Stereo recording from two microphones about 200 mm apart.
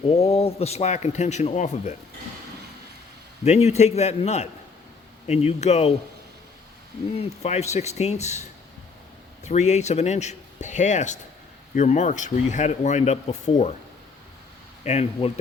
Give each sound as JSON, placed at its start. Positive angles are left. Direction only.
{"t": 0.1, "sound": "speech", "side_deg": 30}
{"t": 3.4, "sound": "speech", "side_deg": 35}
{"t": 7.2, "sound": "speech", "side_deg": 35}
{"t": 14.8, "sound": "speech", "side_deg": 35}